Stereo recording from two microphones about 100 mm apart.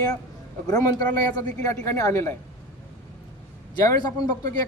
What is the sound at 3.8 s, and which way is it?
Speech, 40° left (ahead or behind).